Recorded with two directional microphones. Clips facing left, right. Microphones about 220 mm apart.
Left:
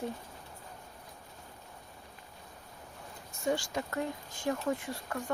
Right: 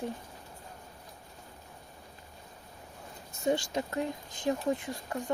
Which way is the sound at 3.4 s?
20° right (ahead or behind).